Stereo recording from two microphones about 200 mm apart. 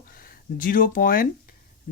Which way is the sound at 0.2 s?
45° left (ahead or behind).